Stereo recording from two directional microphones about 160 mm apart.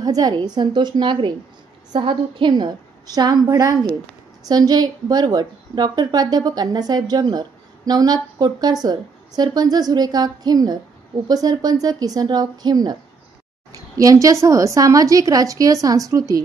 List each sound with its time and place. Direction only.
0.0 s a woman's voice: 25° right (ahead or behind)